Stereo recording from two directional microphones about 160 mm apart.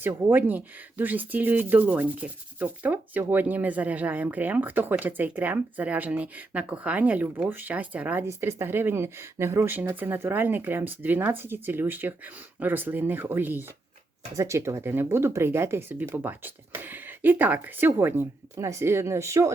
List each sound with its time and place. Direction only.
0.0 s speech: 15° right (ahead or behind)